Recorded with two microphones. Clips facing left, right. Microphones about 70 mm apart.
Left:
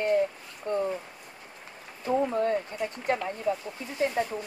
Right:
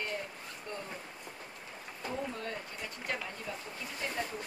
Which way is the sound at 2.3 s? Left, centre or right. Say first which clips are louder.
Left 13 dB; left.